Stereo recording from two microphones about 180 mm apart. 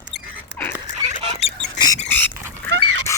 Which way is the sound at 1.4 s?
35° left (ahead or behind).